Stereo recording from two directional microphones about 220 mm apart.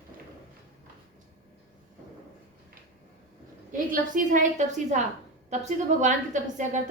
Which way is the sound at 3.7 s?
35° right (ahead or behind).